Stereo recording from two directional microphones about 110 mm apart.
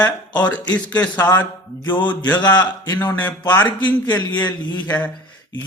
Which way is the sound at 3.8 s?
40° left (ahead or behind).